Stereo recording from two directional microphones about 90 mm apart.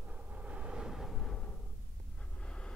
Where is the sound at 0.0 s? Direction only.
15° right (ahead or behind); by 1.6 s 10° left (ahead or behind).